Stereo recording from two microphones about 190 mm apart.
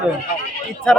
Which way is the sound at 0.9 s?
5° left (ahead or behind).